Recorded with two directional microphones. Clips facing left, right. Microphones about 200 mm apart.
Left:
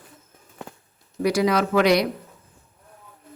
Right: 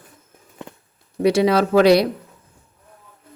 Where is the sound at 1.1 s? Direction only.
25° right (ahead or behind).